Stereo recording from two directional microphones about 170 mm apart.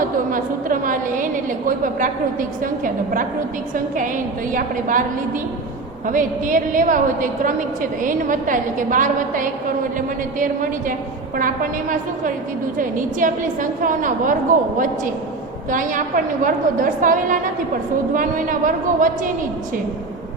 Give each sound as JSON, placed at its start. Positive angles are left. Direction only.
{"t": 0.3, "sound": "a woman's voice", "side_deg": -50}
{"t": 6.1, "sound": "a woman's voice", "side_deg": -50}
{"t": 15.7, "sound": "a woman's voice", "side_deg": -50}